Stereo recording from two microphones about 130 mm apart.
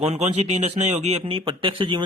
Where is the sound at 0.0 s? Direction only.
55° right (ahead or behind).